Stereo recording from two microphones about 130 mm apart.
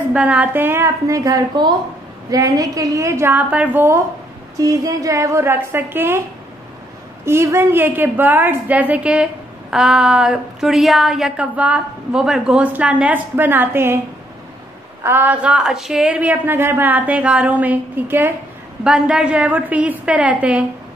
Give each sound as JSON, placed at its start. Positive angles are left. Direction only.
{"t": 0.1, "sound": "a woman's voice", "side_deg": -10}
{"t": 7.2, "sound": "a woman's voice", "side_deg": -20}
{"t": 15.0, "sound": "a woman's voice", "side_deg": -15}